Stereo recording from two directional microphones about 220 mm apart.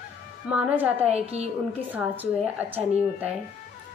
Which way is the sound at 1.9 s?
10° right (ahead or behind).